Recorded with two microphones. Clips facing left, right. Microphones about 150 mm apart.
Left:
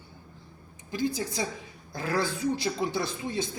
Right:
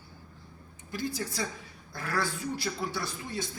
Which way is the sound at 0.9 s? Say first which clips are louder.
Left 4 dB; 20° left (ahead or behind).